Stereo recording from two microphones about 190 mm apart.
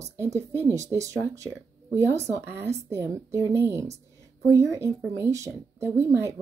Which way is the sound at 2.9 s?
15° right (ahead or behind).